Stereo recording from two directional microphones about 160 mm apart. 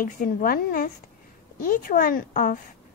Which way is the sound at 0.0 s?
60° left (ahead or behind).